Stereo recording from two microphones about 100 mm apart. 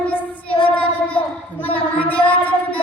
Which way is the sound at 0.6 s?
15° left (ahead or behind).